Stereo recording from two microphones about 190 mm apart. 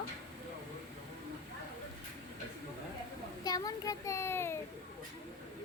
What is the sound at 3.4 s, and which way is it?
A child's voice, 20° left (ahead or behind).